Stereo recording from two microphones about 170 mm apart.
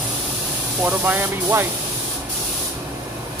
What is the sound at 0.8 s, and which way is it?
Speech, 10° right (ahead or behind).